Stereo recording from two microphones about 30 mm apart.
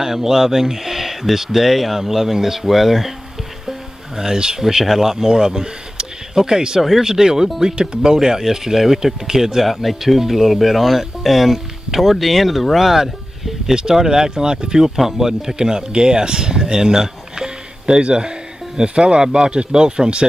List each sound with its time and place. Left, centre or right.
0.0 s speech: centre
4.2 s speech: right
5.1 s speech: centre
6.8 s speech: centre
7.1 s speech: centre
9.6 s speech: centre
13.9 s speech: centre
15.0 s speech: centre
15.5 s speech: right